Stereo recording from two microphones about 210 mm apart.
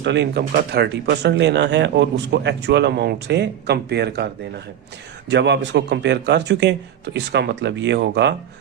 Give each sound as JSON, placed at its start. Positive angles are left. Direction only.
{"t": 0.0, "sound": "speech", "side_deg": -55}
{"t": 5.3, "sound": "a man's voice", "side_deg": -55}